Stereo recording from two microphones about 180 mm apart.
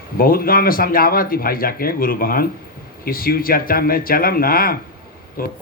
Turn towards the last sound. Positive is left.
turn(degrees=55)  # may be behind; listen again after turning